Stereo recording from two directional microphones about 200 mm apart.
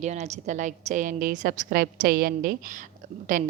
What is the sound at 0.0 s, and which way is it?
A woman's voice, 35° right (ahead or behind).